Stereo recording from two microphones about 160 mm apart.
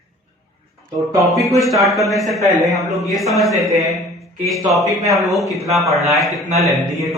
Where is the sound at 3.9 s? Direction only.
Centre (ahead or behind).